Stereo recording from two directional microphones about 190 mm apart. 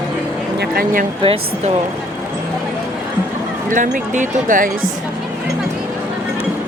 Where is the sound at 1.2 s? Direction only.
30° right (ahead or behind).